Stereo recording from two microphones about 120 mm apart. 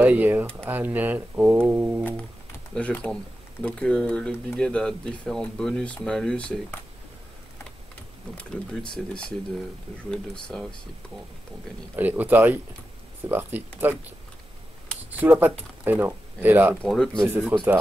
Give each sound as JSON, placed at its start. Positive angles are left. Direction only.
{"t": 0.0, "sound": "speech", "side_deg": -15}
{"t": 2.7, "sound": "speech", "side_deg": 10}
{"t": 8.4, "sound": "speech", "side_deg": 5}
{"t": 11.9, "sound": "speech", "side_deg": -15}
{"t": 16.8, "sound": "speech", "side_deg": 5}
{"t": 17.3, "sound": "speech", "side_deg": -15}